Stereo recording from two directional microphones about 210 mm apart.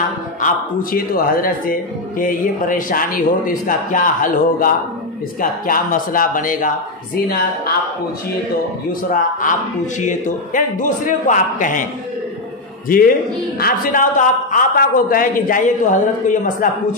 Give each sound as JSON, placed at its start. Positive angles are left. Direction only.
{"t": 0.4, "sound": "a man's voice", "side_deg": 40}
{"t": 9.1, "sound": "a man's voice", "side_deg": 40}
{"t": 12.8, "sound": "a man's voice", "side_deg": 40}